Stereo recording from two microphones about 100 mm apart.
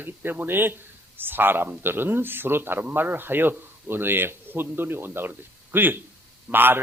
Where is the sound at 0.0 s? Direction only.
20° right (ahead or behind).